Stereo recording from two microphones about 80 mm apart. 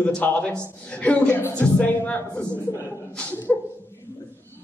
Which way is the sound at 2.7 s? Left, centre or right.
Left.